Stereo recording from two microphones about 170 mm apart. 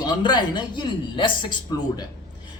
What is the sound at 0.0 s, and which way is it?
A woman's voice, 25° left (ahead or behind).